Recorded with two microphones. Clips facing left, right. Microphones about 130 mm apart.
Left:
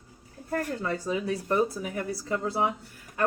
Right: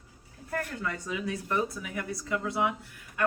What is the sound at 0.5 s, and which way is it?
A woman's voice, 35° left (ahead or behind).